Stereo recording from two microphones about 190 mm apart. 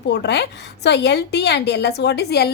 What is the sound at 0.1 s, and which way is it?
A woman's voice, 60° left (ahead or behind).